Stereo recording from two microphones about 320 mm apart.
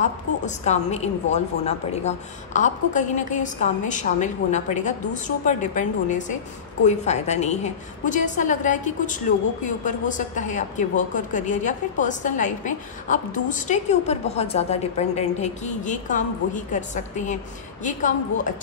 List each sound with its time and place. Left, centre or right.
0.7 s a woman's voice: left